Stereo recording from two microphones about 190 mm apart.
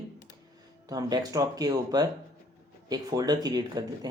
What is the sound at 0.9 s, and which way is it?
Speech, 20° right (ahead or behind).